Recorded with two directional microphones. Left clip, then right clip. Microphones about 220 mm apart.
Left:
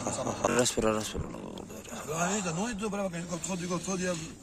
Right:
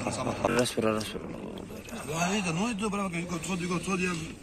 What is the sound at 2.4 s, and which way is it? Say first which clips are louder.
Speech: right 3 dB; 45° left (ahead or behind).